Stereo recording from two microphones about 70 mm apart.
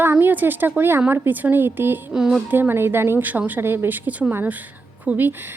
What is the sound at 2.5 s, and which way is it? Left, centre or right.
A woman's voice, right.